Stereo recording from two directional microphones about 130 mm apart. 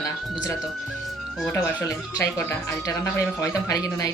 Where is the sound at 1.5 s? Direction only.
20° left (ahead or behind).